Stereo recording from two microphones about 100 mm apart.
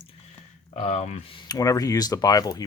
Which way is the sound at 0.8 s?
90° left.